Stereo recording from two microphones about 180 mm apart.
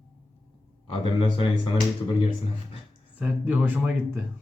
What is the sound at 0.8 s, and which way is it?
Speech, 30° left (ahead or behind).